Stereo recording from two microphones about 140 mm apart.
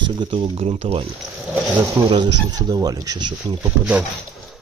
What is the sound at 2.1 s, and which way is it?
Speech, 30° right (ahead or behind).